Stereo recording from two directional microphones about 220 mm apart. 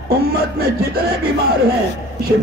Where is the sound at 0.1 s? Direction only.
45° right (ahead or behind).